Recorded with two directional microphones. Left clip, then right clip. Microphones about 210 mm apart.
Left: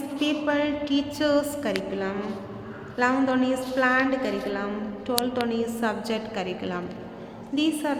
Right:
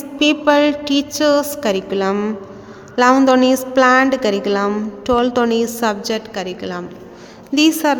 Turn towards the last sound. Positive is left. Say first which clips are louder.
# right 11 dB
turn(degrees=-45)  # may be behind; listen again after turning